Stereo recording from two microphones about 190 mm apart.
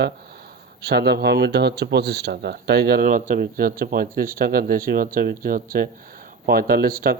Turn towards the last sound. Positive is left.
turn(degrees=-50)  # may be behind; listen again after turning